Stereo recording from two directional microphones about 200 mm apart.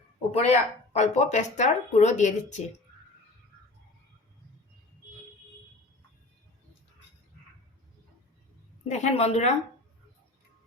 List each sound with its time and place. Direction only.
0.3 s speech: 30° left (ahead or behind)
8.8 s speech: 35° left (ahead or behind)